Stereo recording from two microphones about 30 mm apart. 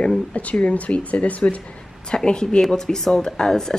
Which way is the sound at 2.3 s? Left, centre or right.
Left.